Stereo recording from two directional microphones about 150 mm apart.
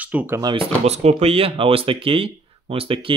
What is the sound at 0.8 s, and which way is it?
Speech, 45° right (ahead or behind).